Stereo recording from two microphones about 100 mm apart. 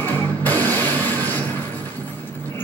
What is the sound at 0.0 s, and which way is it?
Music, 20° left (ahead or behind).